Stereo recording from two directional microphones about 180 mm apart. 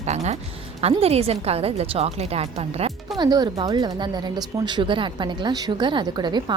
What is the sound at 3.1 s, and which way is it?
Speech, 20° right (ahead or behind).